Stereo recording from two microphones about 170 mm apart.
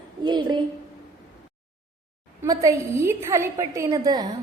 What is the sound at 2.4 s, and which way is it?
A woman's voice, 20° right (ahead or behind).